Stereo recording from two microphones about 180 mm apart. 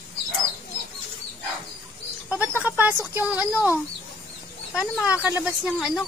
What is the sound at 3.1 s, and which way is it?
Speech, 10° right (ahead or behind).